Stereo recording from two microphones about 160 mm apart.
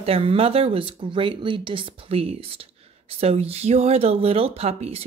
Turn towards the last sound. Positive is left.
turn(degrees=-40)  # may be behind; listen again after turning